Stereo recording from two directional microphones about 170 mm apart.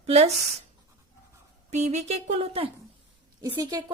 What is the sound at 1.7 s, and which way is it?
A woman's voice, 40° right (ahead or behind).